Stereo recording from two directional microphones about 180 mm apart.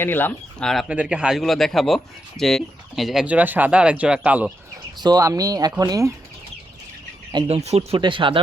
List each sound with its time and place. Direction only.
0.0 s speech: 10° left (ahead or behind); by 4.5 s 5° right (ahead or behind)
4.9 s speech: 20° right (ahead or behind)
7.4 s speech: 35° right (ahead or behind)